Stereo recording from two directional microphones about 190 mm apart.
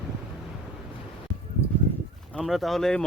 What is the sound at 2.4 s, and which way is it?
Speech, centre (ahead or behind).